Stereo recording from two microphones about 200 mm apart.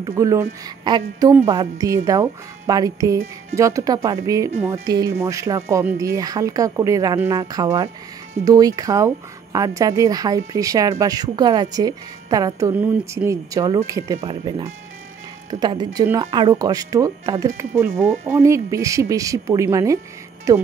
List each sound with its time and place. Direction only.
0.0 s speech: 15° right (ahead or behind)